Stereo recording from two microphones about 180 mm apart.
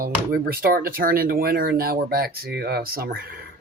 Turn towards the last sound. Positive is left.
turn(degrees=-55)  # may be behind; listen again after turning